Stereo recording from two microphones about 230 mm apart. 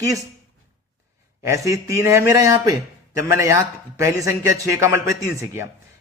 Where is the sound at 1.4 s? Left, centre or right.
Centre.